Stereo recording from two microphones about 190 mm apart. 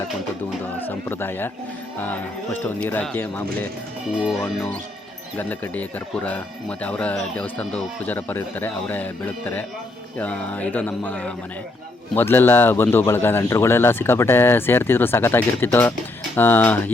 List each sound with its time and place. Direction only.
0.9 s speech: 10° left (ahead or behind)